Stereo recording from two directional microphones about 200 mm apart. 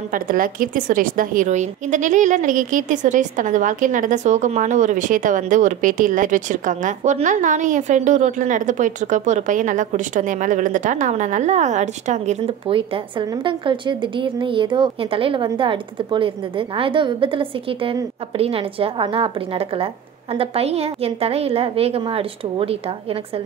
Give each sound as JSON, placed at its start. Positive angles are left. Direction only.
{"t": 0.1, "sound": "a woman's voice", "side_deg": -45}